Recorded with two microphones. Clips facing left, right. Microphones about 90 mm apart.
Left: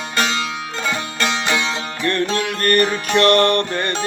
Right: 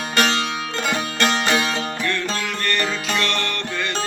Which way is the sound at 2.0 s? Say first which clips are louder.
Left 5 dB; 50° left (ahead or behind).